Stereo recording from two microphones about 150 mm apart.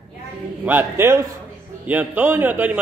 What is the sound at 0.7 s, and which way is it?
A man's voice, 15° right (ahead or behind).